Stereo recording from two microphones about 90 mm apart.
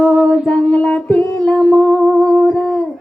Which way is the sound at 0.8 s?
10° left (ahead or behind).